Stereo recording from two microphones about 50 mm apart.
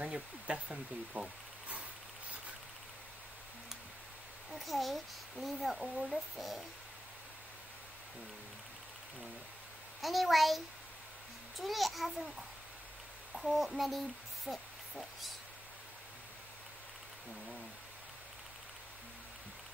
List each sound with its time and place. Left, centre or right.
0.0 s speech: right
4.5 s speech: centre
10.0 s speech: centre